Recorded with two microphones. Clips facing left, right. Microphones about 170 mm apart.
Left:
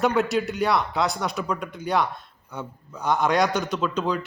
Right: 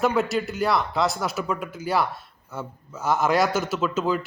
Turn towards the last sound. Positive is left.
turn(degrees=-5)  # may be behind; listen again after turning